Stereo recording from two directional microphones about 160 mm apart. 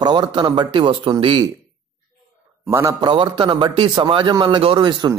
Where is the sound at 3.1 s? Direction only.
30° right (ahead or behind).